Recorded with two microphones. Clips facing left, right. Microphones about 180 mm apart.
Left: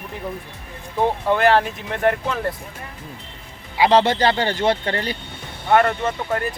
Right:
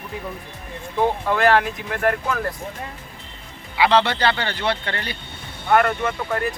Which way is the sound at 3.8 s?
40° left (ahead or behind).